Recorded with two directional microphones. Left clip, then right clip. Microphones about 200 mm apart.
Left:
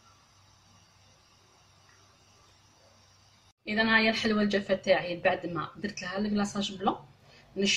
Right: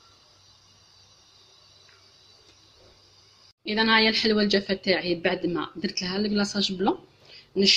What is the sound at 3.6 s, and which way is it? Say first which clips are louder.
Speech: right 4 dB; 50° right (ahead or behind).